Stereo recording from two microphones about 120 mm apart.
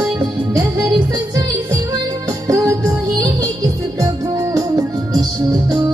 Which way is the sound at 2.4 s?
25° right (ahead or behind).